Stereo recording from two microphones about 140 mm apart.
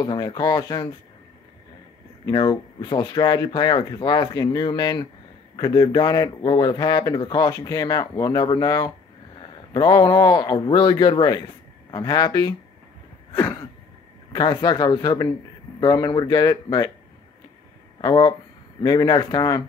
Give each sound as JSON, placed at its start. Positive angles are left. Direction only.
{"t": 0.0, "sound": "speech", "side_deg": 30}
{"t": 2.2, "sound": "speech", "side_deg": 35}
{"t": 14.3, "sound": "speech", "side_deg": 30}
{"t": 18.0, "sound": "speech", "side_deg": 30}